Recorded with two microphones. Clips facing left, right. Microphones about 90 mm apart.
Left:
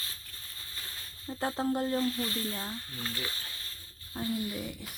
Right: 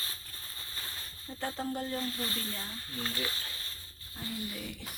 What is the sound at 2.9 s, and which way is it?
Speech, centre (ahead or behind).